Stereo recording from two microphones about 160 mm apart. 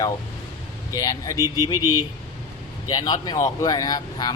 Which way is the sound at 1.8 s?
15° right (ahead or behind).